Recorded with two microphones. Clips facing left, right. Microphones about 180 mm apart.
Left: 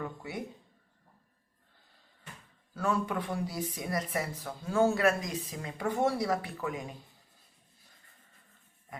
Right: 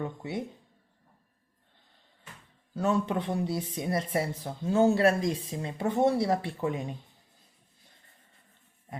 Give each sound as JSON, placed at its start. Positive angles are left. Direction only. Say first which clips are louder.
{"t": 0.0, "sound": "speech", "louder": "right 4 dB", "side_deg": -25}
{"t": 2.7, "sound": "speech", "louder": "right 4 dB", "side_deg": -25}